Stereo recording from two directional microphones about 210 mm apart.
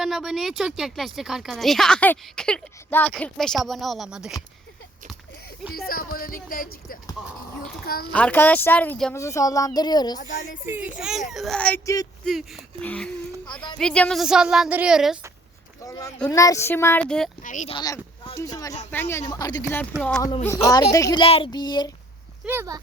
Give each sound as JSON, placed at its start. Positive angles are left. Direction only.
{"t": 0.0, "sound": "speech", "side_deg": 0}
{"t": 5.7, "sound": "speech", "side_deg": 45}
{"t": 8.1, "sound": "speech", "side_deg": 10}
{"t": 10.2, "sound": "a woman's voice", "side_deg": 40}
{"t": 10.7, "sound": "speech", "side_deg": -5}
{"t": 12.2, "sound": "speech", "side_deg": 0}
{"t": 15.8, "sound": "speech", "side_deg": 15}
{"t": 17.4, "sound": "a woman's voice", "side_deg": 35}
{"t": 17.7, "sound": "speech", "side_deg": 20}
{"t": 20.7, "sound": "speech", "side_deg": 15}
{"t": 22.4, "sound": "speech", "side_deg": -10}